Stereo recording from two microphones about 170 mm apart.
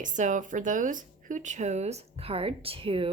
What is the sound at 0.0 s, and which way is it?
Speech, 45° right (ahead or behind).